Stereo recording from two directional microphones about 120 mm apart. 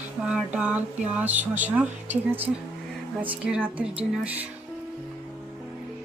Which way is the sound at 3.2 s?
10° right (ahead or behind).